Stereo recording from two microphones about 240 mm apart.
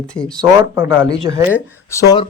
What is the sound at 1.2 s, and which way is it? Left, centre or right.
Speech, centre.